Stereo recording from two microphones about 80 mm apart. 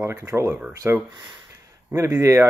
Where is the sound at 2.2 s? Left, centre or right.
Right.